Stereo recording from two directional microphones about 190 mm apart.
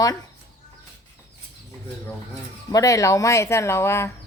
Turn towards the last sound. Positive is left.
turn(degrees=15)  # may be behind; listen again after turning